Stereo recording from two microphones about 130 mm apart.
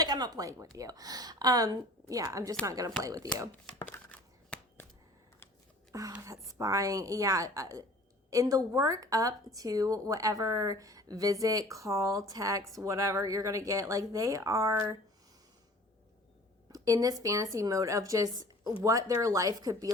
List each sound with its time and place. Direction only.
0.0 s a woman's voice: 30° right (ahead or behind)
3.5 s a sound: 15° left (ahead or behind)
5.9 s a woman's voice: 25° right (ahead or behind)
16.7 s a woman's voice: 25° right (ahead or behind)